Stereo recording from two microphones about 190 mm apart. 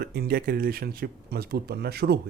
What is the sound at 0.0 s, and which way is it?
Speech, 50° right (ahead or behind).